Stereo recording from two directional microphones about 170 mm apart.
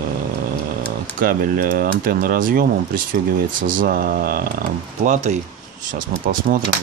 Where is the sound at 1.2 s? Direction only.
55° right (ahead or behind).